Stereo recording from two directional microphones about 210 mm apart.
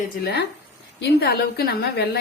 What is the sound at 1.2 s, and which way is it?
Speech, 50° left (ahead or behind).